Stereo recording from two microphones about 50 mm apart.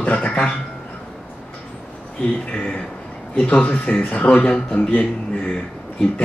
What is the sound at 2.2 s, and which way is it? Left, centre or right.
Speech, centre.